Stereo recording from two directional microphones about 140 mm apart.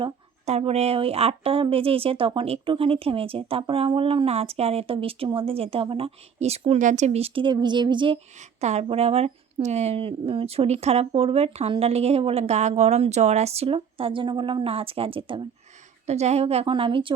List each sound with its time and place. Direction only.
0.4 s speech: 50° right (ahead or behind)
8.4 s speech: 55° right (ahead or behind)
16.0 s speech: 50° right (ahead or behind)